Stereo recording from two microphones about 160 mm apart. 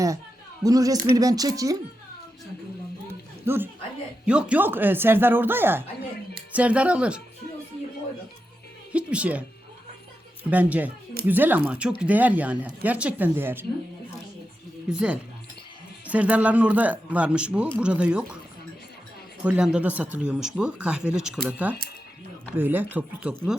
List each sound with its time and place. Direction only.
0.6 s speech: 20° right (ahead or behind)
3.1 s a sound: 15° right (ahead or behind)
4.3 s speech: 5° right (ahead or behind)
8.9 s speech: 5° right (ahead or behind)
10.5 s speech: 10° right (ahead or behind)
14.8 s speech: 5° right (ahead or behind)
19.5 s speech: 5° right (ahead or behind)